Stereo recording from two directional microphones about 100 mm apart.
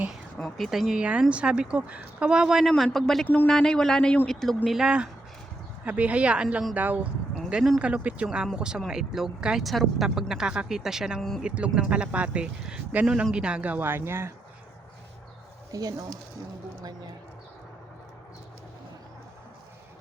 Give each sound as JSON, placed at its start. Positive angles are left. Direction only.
{"t": 0.3, "sound": "a man's voice", "side_deg": 5}
{"t": 3.2, "sound": "speech", "side_deg": 15}
{"t": 3.5, "sound": "a man's voice", "side_deg": 5}
{"t": 7.5, "sound": "speech", "side_deg": 0}
{"t": 7.8, "sound": "a man's voice", "side_deg": -15}
{"t": 15.7, "sound": "speech", "side_deg": -35}